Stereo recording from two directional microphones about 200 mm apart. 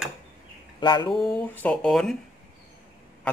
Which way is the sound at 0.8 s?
20° left (ahead or behind).